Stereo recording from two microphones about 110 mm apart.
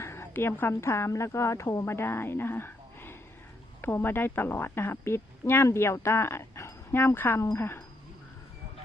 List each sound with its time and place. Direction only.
0.0 s a woman's voice: 25° left (ahead or behind)